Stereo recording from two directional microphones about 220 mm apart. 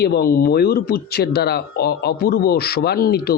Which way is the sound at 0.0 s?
45° left (ahead or behind).